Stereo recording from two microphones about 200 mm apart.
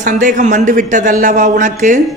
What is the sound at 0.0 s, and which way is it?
Speech, 40° right (ahead or behind).